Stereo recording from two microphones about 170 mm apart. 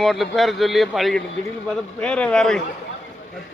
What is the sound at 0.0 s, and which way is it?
Speech, centre (ahead or behind).